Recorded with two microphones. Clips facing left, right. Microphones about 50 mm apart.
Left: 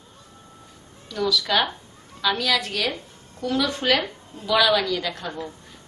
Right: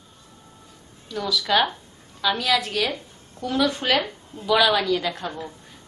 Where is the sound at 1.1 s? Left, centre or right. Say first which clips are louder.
Even; centre.